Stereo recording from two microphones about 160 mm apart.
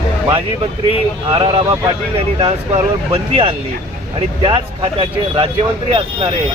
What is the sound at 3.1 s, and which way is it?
Speech, 35° right (ahead or behind).